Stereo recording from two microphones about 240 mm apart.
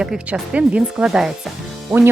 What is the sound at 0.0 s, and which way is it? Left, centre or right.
Speech, centre.